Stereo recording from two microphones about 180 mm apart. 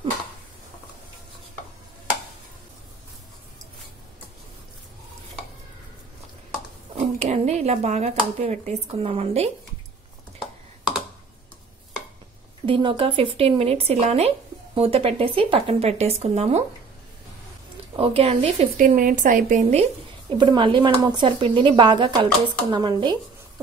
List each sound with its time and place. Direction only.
7.0 s speech: 35° right (ahead or behind)
12.6 s speech: 30° right (ahead or behind)
17.9 s speech: 30° right (ahead or behind)
18.9 s a woman's voice: 50° right (ahead or behind)
20.3 s speech: 25° right (ahead or behind)